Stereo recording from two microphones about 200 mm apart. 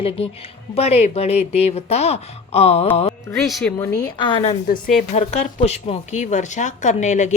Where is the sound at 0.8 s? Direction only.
30° left (ahead or behind).